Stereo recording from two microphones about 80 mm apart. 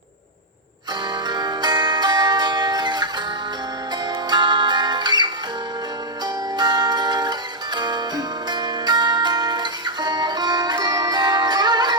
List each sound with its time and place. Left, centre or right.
1.3 s music: right
4.3 s music: right